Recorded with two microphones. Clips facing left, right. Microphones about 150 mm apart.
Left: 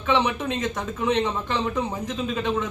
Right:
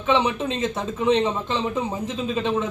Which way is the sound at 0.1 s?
25° right (ahead or behind).